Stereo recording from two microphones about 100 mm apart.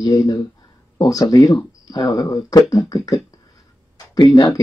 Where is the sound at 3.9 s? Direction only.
40° left (ahead or behind).